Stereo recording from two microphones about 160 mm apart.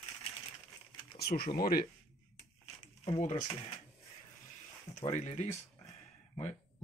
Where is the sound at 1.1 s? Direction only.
75° left (ahead or behind).